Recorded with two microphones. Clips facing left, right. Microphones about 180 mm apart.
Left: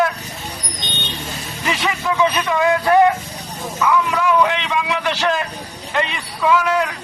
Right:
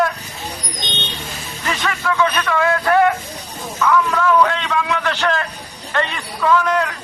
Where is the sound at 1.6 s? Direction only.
15° left (ahead or behind).